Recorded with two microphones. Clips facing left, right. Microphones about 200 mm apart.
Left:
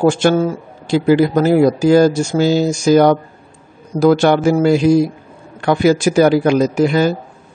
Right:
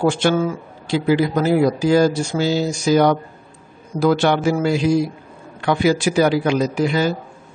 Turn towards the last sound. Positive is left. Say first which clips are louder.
# left 5 dB
turn(degrees=45)  # may be behind; listen again after turning